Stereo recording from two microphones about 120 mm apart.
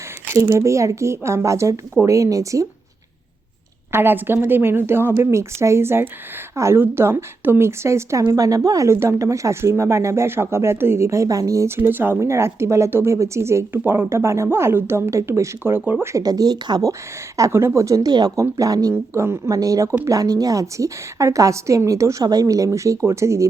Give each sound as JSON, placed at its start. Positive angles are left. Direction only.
{"t": 0.3, "sound": "speech", "side_deg": -25}
{"t": 3.9, "sound": "speech", "side_deg": -20}
{"t": 16.1, "sound": "speech", "side_deg": -30}